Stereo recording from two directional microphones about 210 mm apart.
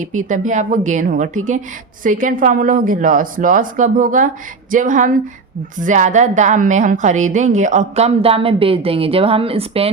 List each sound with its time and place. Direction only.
0.0 s a woman's voice: 35° right (ahead or behind)